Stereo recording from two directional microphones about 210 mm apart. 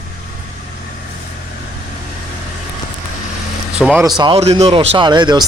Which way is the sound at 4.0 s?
20° right (ahead or behind).